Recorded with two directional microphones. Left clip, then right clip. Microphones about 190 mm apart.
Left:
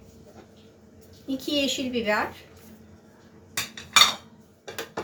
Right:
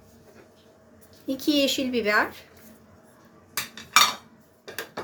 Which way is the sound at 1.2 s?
60° right (ahead or behind).